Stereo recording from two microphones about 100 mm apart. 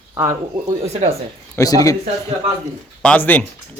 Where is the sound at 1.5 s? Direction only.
35° left (ahead or behind).